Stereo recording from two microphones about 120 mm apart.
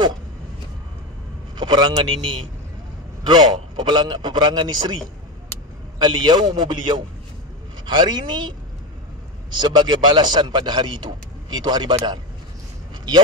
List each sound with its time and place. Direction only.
1.6 s speech: 35° right (ahead or behind)
3.3 s a man's voice: 35° right (ahead or behind)
5.9 s a man's voice: 35° right (ahead or behind)